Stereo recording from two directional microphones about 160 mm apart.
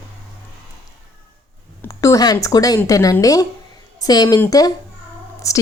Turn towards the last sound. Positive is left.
turn(degrees=20)  # may be behind; listen again after turning